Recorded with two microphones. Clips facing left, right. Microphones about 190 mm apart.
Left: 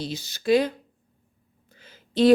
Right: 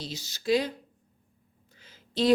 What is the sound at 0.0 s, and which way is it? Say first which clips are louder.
Speech: left 5 dB; 55° left (ahead or behind).